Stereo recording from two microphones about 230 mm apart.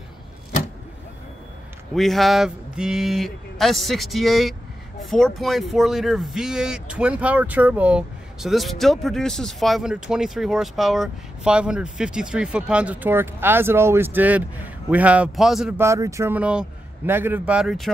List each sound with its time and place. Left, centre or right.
2.0 s speech: centre